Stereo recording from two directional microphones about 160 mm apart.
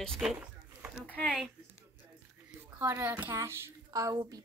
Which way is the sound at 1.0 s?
10° left (ahead or behind).